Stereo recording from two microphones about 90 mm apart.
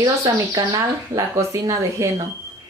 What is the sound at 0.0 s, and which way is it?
Speech, 40° right (ahead or behind).